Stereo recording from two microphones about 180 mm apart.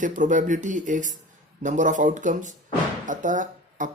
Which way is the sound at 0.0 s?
45° right (ahead or behind).